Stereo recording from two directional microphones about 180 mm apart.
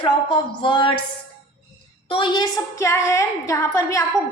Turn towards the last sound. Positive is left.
turn(degrees=15)  # may be behind; listen again after turning